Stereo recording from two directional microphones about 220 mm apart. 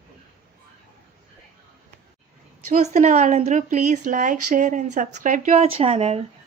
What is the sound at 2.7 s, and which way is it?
Speech, 30° right (ahead or behind).